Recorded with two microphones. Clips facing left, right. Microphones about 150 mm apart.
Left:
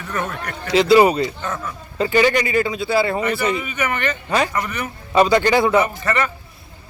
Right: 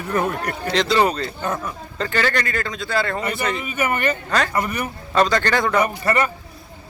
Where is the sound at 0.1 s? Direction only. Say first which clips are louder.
Right 4 dB; 35° right (ahead or behind).